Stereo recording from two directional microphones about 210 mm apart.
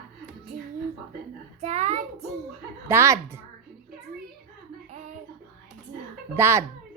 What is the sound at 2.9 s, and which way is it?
Speech, 10° right (ahead or behind).